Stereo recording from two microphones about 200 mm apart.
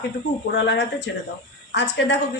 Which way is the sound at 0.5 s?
60° left (ahead or behind).